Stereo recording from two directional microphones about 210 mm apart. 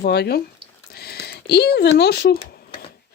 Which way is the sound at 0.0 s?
50° left (ahead or behind).